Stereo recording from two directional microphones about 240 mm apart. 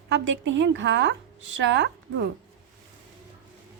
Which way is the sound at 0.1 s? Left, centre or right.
Right.